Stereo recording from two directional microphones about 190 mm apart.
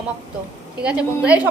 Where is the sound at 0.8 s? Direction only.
5° right (ahead or behind).